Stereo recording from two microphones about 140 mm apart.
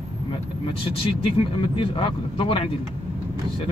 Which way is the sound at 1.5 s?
40° left (ahead or behind).